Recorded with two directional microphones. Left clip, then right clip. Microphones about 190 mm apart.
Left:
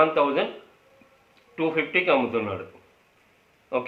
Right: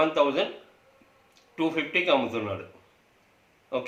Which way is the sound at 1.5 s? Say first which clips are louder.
Left 3 dB; 10° left (ahead or behind).